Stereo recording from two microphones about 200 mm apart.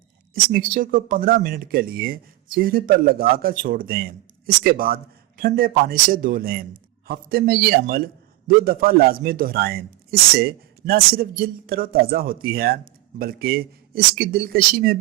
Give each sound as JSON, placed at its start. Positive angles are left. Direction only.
{"t": 0.3, "sound": "a man's voice", "side_deg": -45}